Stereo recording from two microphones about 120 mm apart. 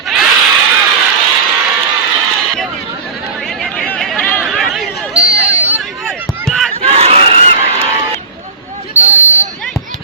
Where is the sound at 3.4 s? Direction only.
Centre (ahead or behind).